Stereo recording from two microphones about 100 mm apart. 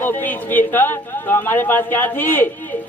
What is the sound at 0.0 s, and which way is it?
A man's voice, 20° left (ahead or behind).